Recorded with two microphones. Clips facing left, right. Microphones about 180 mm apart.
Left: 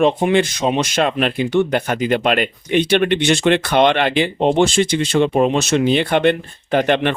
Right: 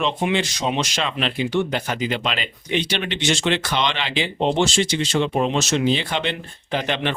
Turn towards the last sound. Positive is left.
turn(degrees=55)  # may be behind; listen again after turning